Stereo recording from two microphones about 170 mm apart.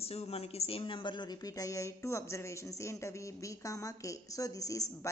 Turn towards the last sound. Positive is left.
turn(degrees=20)  # may be behind; listen again after turning